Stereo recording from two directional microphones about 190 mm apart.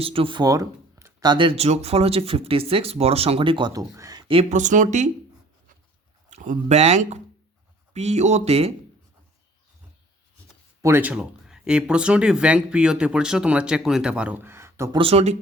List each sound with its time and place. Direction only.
0.0 s speech: 30° right (ahead or behind)
6.3 s speech: 40° right (ahead or behind)
10.8 s speech: 10° right (ahead or behind)
14.9 s speech: 30° right (ahead or behind)